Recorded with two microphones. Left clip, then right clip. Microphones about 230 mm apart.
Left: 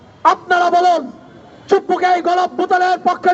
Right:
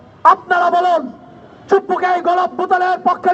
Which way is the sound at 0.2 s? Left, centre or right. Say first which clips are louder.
Right 2 dB; left.